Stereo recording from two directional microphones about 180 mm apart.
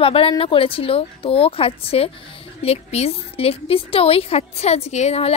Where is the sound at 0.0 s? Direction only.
30° left (ahead or behind).